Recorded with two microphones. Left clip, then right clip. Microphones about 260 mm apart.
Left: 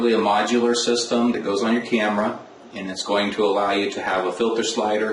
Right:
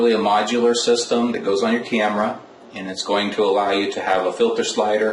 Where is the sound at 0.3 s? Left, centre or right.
Centre.